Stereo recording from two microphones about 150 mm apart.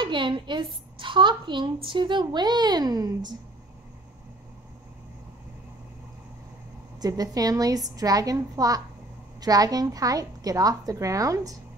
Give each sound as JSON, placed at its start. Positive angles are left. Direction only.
{"t": 0.0, "sound": "a child's voice", "side_deg": -35}
{"t": 7.0, "sound": "a woman's voice", "side_deg": -25}